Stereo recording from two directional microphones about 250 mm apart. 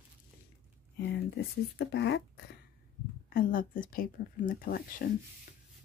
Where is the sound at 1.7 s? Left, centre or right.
Left.